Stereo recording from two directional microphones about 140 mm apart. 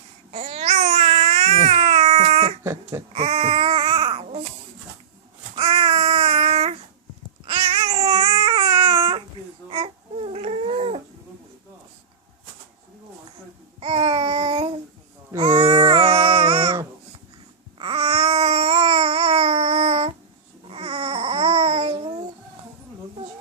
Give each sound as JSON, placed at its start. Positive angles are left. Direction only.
{"t": 0.3, "sound": "babbling", "side_deg": -50}
{"t": 5.5, "sound": "babbling", "side_deg": -45}
{"t": 13.7, "sound": "babbling", "side_deg": -45}
{"t": 15.6, "sound": "a sound", "side_deg": -40}
{"t": 17.7, "sound": "babbling", "side_deg": -40}